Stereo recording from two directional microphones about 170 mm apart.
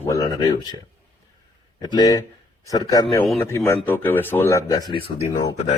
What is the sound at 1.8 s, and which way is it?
Speech, 25° left (ahead or behind).